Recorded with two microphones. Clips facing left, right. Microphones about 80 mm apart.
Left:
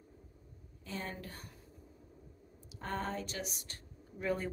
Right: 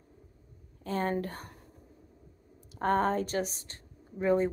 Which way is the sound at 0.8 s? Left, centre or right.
Right.